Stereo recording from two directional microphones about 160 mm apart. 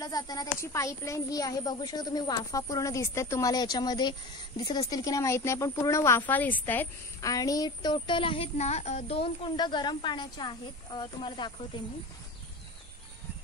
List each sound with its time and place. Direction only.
0.0 s a woman's voice: 25° left (ahead or behind)